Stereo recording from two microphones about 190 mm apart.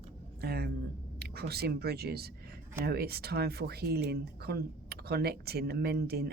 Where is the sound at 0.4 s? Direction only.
55° right (ahead or behind).